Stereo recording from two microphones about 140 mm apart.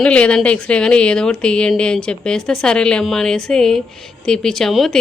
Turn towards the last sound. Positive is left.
turn(degrees=0)  # may be behind; listen again after turning